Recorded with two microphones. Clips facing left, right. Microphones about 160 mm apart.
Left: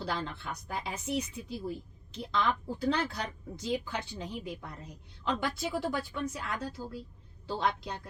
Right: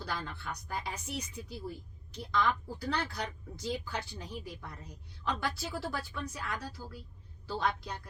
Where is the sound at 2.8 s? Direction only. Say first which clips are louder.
Left 5 dB; 25° left (ahead or behind).